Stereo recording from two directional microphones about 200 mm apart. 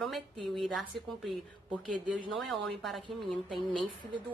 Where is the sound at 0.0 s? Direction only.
Centre (ahead or behind).